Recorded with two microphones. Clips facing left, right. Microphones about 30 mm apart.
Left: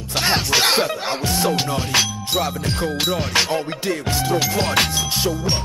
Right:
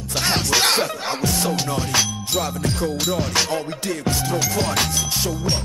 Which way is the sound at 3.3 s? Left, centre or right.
Centre.